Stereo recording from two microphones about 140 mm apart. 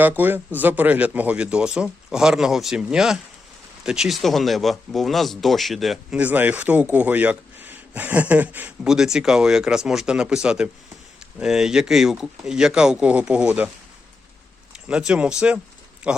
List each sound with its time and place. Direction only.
0.0 s speech: 15° right (ahead or behind)
14.7 s speech: 5° right (ahead or behind)